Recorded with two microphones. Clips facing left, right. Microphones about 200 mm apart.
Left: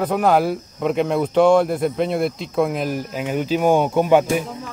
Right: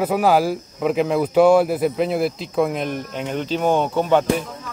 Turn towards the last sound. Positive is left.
turn(degrees=10)  # may be behind; listen again after turning